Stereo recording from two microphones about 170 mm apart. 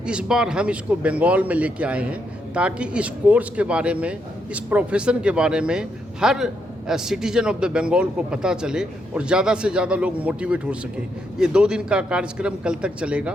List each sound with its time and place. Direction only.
0.0 s speech: 5° right (ahead or behind)